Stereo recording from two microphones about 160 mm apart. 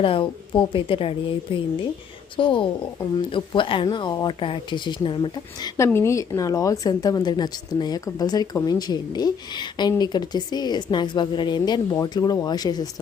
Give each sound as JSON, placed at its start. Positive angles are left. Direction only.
{"t": 0.0, "sound": "a woman's voice", "side_deg": 35}